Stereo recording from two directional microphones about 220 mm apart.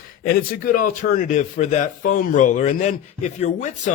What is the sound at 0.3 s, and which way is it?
A man's voice, 40° left (ahead or behind).